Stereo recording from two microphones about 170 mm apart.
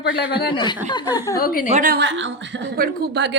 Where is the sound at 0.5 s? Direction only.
25° left (ahead or behind).